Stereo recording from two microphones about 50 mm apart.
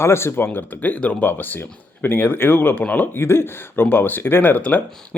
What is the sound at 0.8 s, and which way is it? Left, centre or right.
Speech, left.